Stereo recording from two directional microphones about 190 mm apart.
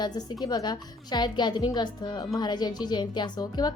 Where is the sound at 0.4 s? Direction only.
20° left (ahead or behind).